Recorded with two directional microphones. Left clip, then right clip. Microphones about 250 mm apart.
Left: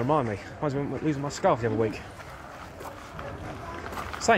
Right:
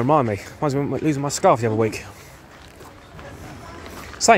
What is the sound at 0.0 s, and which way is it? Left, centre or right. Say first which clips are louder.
Speech: right 7 dB; right.